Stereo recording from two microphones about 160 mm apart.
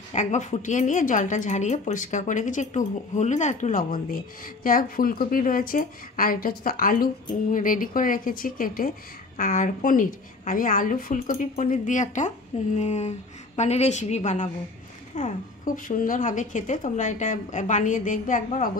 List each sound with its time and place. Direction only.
0.1 s a woman's voice: 50° left (ahead or behind)